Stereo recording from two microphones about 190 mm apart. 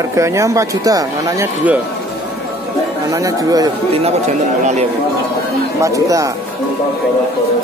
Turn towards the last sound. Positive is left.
turn(degrees=-15)  # may be behind; listen again after turning